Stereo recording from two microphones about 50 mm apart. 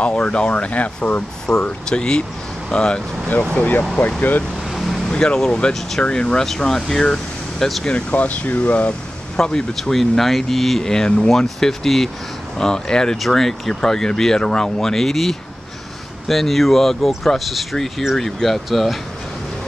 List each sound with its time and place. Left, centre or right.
0.0 s speech: left
1.5 s speech: centre
4.2 s speech: left
4.6 s vehicle: centre
5.1 s speech: centre
7.8 s speech: left
9.4 s speech: centre